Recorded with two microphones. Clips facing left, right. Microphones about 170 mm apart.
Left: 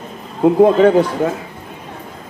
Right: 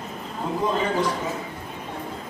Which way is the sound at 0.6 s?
65° left (ahead or behind).